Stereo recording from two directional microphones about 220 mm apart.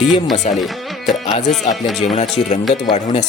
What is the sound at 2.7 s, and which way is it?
Speech, 25° left (ahead or behind).